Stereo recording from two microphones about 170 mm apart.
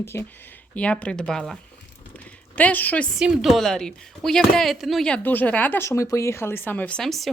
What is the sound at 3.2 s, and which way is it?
Speech, centre (ahead or behind).